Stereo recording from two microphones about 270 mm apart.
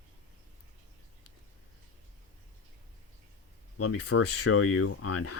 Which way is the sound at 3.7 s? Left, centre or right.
Left.